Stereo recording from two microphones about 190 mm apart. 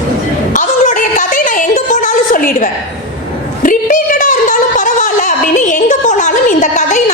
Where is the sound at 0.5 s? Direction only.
45° left (ahead or behind).